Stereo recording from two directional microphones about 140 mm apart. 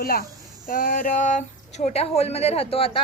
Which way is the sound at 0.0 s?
90° left.